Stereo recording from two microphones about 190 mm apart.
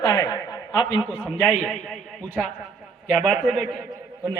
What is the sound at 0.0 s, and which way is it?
A man's voice, 20° left (ahead or behind).